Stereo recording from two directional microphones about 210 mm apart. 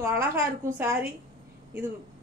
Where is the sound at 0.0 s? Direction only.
15° right (ahead or behind).